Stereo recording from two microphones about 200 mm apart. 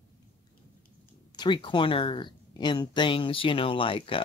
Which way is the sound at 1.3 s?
25° left (ahead or behind).